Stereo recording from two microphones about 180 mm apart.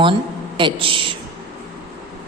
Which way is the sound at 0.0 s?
30° right (ahead or behind).